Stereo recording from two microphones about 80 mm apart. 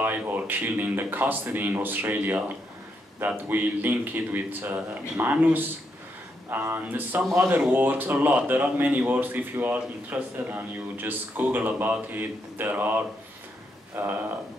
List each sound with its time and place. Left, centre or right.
0.0 s speech: right